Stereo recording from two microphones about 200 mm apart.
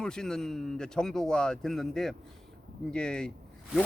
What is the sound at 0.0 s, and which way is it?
Speech, 5° left (ahead or behind).